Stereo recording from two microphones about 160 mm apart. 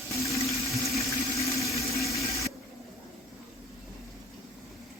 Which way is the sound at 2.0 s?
20° left (ahead or behind).